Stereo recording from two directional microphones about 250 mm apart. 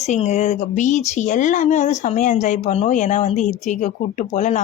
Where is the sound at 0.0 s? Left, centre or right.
Left.